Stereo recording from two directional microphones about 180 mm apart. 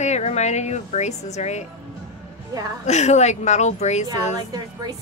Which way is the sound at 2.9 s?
40° left (ahead or behind).